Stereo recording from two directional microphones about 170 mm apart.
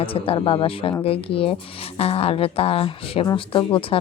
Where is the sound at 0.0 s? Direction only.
30° left (ahead or behind).